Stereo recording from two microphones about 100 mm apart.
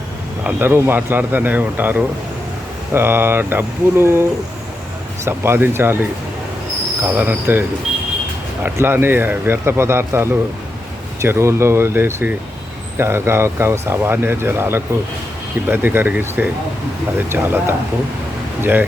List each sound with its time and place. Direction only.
0.4 s speech: 20° right (ahead or behind)
8.6 s speech: 25° right (ahead or behind)